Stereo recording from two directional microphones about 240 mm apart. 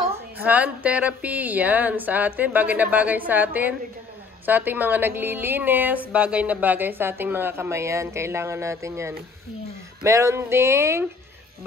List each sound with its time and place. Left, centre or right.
0.4 s a woman's voice: centre